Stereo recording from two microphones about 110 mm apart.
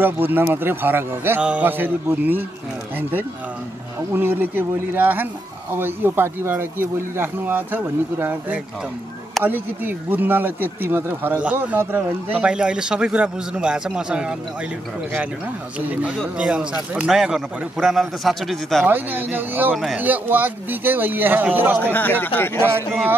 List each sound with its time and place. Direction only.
0.0 s speech: 20° right (ahead or behind)
15.9 s a man's voice: 15° right (ahead or behind)
18.9 s speech: 15° right (ahead or behind)
19.7 s a man's voice: centre (ahead or behind)
20.0 s speech: 15° right (ahead or behind)
21.9 s speech: 15° left (ahead or behind)